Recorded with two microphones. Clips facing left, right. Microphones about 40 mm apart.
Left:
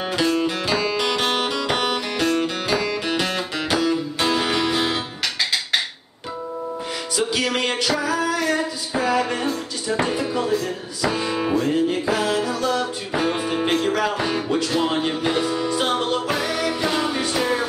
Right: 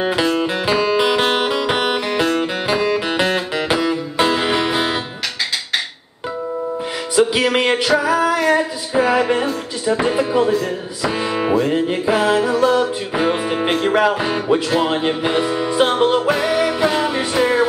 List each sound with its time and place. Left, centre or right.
0.0 s music: centre
7.2 s music: right
10.5 s music: centre